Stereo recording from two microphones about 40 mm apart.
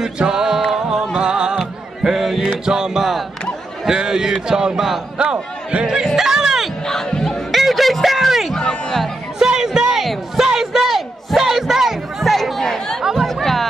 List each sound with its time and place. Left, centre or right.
0.0 s music: centre
2.1 s music: centre
2.6 s music: centre
3.8 s a man's voice: centre
5.1 s speech: right
6.0 s music: centre
6.9 s music: centre
7.5 s a sound: centre
9.4 s music: centre
13.2 s chatter: centre